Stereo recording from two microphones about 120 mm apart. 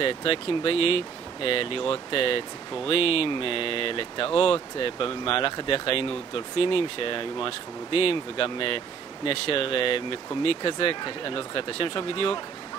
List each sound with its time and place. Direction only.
0.0 s speech: 50° left (ahead or behind)